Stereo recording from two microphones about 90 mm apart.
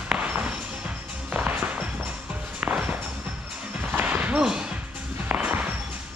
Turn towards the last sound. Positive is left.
turn(degrees=-15)  # may be behind; listen again after turning